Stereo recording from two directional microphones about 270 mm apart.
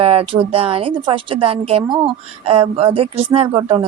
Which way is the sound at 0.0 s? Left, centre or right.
Right.